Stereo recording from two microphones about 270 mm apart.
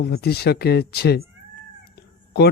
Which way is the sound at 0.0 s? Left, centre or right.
Left.